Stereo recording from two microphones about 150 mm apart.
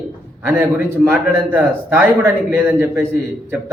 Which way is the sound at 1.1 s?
15° right (ahead or behind).